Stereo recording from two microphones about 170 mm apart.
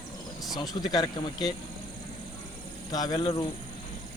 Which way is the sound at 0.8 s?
25° left (ahead or behind).